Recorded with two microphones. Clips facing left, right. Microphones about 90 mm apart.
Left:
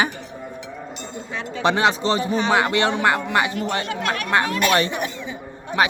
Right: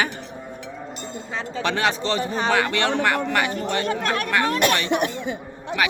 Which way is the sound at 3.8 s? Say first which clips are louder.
Right 2 dB; 40° right (ahead or behind).